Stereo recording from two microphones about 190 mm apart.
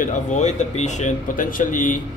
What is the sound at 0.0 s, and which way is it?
Speech, 40° left (ahead or behind).